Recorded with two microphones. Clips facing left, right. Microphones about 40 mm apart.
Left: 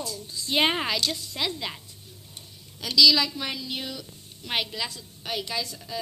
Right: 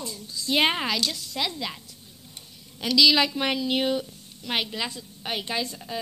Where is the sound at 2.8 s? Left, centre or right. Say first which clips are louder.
Even; right.